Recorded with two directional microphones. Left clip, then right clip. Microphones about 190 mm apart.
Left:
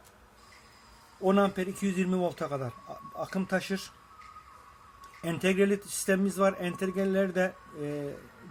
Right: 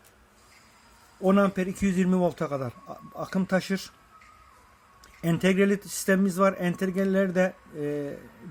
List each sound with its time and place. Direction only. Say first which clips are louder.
1.2 s speech: right 3 dB; 45° right (ahead or behind)
2.2 s speech: right 4 dB; 50° right (ahead or behind)
3.3 s speech: right 5 dB; 45° right (ahead or behind)
5.2 s speech: right 3 dB; 50° right (ahead or behind)